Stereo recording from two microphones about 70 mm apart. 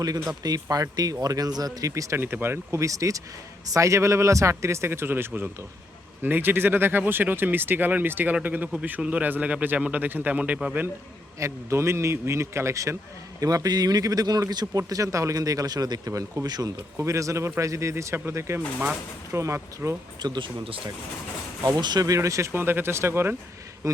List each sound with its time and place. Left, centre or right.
0.0 s speech: right
1.9 s speech: right
2.2 s speech: right
2.8 s speech: right; by 10.8 s centre
11.3 s speech: right
13.4 s speech: right
14.8 s speech: right
16.5 s speech: right
17.0 s speech: right
20.2 s speech: right
21.8 s speech: right
22.0 s speech: right
23.8 s speech: right